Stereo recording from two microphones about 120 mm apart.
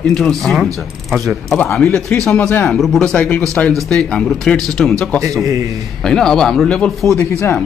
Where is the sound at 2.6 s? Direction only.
Centre (ahead or behind).